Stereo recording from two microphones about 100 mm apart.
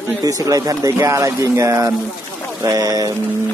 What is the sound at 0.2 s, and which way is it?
Speech, 35° right (ahead or behind).